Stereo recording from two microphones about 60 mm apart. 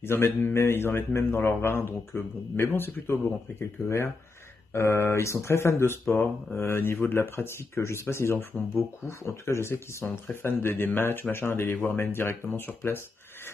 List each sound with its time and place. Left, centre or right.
0.0 s speech: left